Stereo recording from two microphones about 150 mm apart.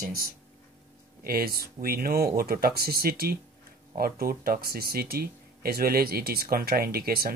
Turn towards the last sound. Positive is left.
turn(degrees=-90)